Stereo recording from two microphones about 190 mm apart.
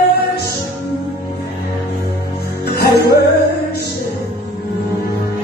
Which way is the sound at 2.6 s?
60° left (ahead or behind).